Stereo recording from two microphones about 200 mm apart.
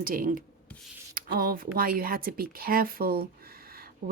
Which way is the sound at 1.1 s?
45° right (ahead or behind).